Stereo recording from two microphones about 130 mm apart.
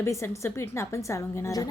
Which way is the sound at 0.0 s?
20° left (ahead or behind).